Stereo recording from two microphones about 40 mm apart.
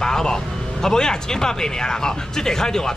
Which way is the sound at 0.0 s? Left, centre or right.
Centre.